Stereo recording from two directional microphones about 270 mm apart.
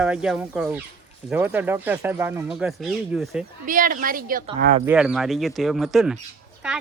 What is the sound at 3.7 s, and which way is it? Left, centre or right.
A woman's voice, right.